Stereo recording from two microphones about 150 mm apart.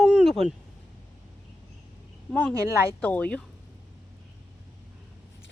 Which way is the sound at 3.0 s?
10° left (ahead or behind).